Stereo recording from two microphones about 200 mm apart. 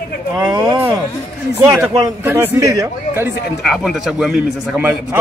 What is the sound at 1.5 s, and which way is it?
A man's voice, 5° right (ahead or behind).